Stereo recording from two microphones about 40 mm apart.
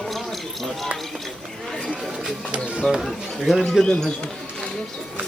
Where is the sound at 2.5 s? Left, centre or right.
Right.